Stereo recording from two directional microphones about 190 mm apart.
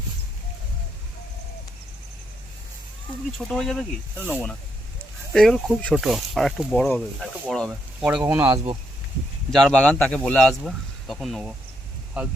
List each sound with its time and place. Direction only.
3.3 s speech: centre (ahead or behind)
8.4 s speech: 25° right (ahead or behind)
9.5 s speech: centre (ahead or behind)